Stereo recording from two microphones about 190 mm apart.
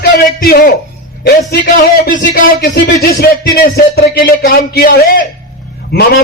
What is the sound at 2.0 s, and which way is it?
A man's voice, 45° left (ahead or behind).